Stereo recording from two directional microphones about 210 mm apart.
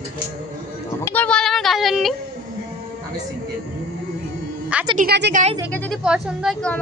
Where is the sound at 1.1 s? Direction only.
5° left (ahead or behind).